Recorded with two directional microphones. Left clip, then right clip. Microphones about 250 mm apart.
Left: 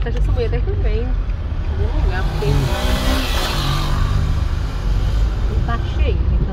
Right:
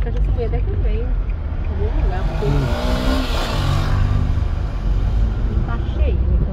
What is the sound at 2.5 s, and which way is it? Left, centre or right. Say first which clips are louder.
Vehicle: left 1 dB; right.